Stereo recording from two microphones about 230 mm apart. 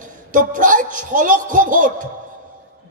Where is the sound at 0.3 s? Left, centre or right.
Right.